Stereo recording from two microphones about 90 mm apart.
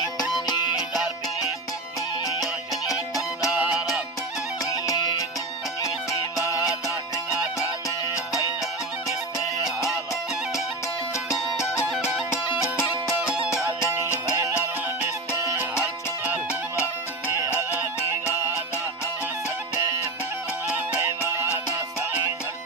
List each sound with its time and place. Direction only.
0.4 s music: 50° left (ahead or behind)
2.2 s music: 40° left (ahead or behind)
3.5 s music: 15° right (ahead or behind)
4.6 s music: 40° left (ahead or behind)
7.9 s music: 35° left (ahead or behind)
11.1 s music: 35° left (ahead or behind)
14.0 s music: 30° left (ahead or behind)
15.8 s music: 15° right (ahead or behind)
21.2 s music: 30° right (ahead or behind)